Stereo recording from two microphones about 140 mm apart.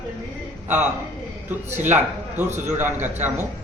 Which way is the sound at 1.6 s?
55° right (ahead or behind).